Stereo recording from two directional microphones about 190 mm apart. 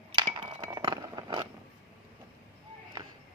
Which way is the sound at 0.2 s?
20° right (ahead or behind).